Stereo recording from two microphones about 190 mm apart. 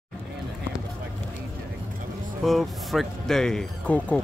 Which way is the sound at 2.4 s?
Centre (ahead or behind).